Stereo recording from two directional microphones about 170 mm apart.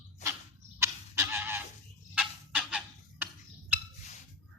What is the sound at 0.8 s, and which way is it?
Fowl, 15° right (ahead or behind).